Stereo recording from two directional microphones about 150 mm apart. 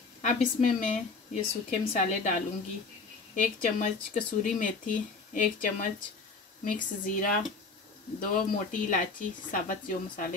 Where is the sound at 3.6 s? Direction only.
60° left (ahead or behind).